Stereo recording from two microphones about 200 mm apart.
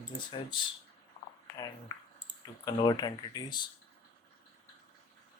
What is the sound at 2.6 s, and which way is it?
Speech, 20° left (ahead or behind).